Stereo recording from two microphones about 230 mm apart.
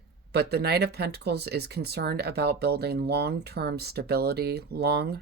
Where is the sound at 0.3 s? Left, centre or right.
Right.